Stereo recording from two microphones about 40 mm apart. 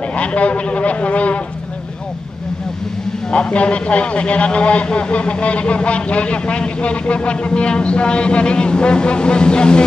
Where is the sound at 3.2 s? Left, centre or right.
Left.